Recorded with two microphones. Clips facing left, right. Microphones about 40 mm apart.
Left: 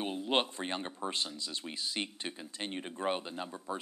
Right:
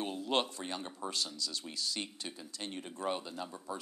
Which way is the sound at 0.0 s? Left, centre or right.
Left.